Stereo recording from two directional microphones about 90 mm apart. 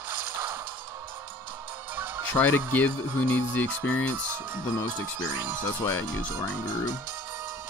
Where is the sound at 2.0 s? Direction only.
25° right (ahead or behind).